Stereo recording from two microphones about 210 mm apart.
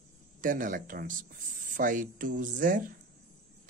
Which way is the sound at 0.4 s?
40° right (ahead or behind).